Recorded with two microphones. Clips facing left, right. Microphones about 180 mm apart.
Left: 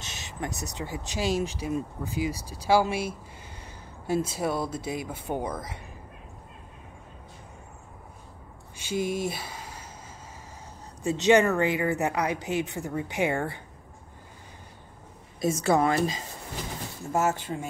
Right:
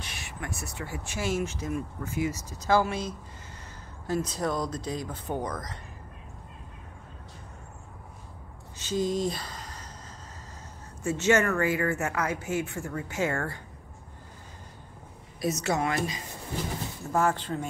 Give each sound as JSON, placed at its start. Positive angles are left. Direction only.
{"t": 0.2, "sound": "speech", "side_deg": 20}
{"t": 8.7, "sound": "gasp", "side_deg": 10}
{"t": 11.0, "sound": "speech", "side_deg": 15}
{"t": 15.4, "sound": "a woman's voice", "side_deg": 30}
{"t": 17.2, "sound": "speech", "side_deg": 10}